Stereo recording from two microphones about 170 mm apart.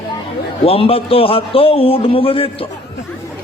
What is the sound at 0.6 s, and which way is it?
A man's voice, 35° left (ahead or behind).